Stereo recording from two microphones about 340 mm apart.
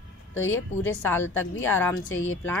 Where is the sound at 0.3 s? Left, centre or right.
Left.